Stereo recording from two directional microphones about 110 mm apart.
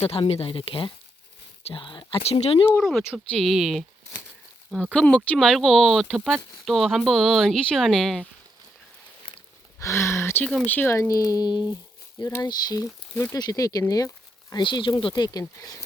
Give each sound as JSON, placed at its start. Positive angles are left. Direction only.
{"t": 0.0, "sound": "speech", "side_deg": 60}
{"t": 2.2, "sound": "speech", "side_deg": 60}
{"t": 2.8, "sound": "speech", "side_deg": 5}
{"t": 4.9, "sound": "speech", "side_deg": 10}
{"t": 9.8, "sound": "speech", "side_deg": 25}
{"t": 11.1, "sound": "speech", "side_deg": 30}
{"t": 14.5, "sound": "speech", "side_deg": 45}